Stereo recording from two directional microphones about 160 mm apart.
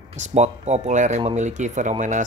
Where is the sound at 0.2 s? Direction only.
45° right (ahead or behind).